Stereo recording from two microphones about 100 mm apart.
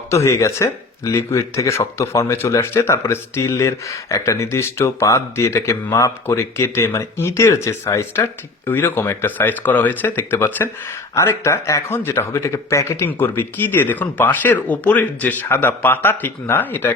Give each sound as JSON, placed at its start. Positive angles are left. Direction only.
{"t": 0.1, "sound": "speech", "side_deg": 30}